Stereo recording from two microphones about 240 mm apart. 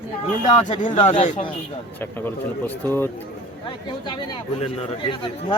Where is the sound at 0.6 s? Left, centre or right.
Left.